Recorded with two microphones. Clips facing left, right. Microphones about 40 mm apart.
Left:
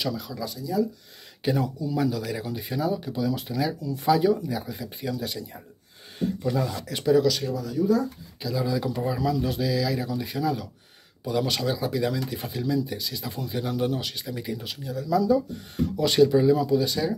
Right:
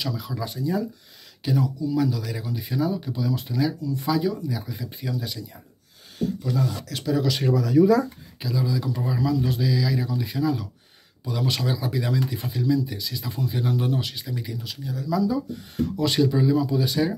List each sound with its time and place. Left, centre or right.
0.0 s speech: centre
0.5 s speech: right
1.4 s speech: centre
4.7 s speech: centre
6.1 s speech: left
6.7 s speech: centre
7.5 s speech: right
8.5 s speech: centre
8.9 s speech: centre
14.5 s speech: centre
14.9 s speech: centre